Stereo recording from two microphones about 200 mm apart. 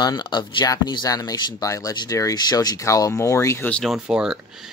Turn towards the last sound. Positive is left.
turn(degrees=0)  # may be behind; listen again after turning